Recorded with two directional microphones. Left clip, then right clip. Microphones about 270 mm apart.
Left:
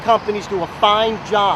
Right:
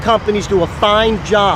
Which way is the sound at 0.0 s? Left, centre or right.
Right.